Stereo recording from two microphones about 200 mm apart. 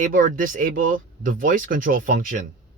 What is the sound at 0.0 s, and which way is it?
Speech, 45° right (ahead or behind).